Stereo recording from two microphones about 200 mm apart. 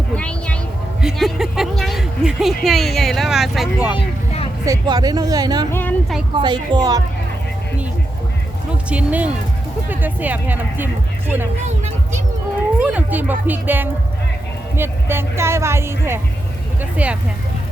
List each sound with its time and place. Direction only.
0.2 s speech: 5° left (ahead or behind)
3.9 s vehicle: 30° left (ahead or behind)
4.6 s speech: 15° right (ahead or behind)
8.9 s speech: 5° right (ahead or behind)
12.8 s speech: 10° right (ahead or behind)